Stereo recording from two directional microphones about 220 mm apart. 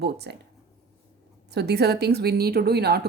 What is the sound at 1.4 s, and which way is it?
A woman's voice, 50° right (ahead or behind).